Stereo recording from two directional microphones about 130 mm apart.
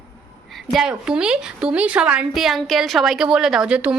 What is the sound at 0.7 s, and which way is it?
A woman's voice, 5° right (ahead or behind).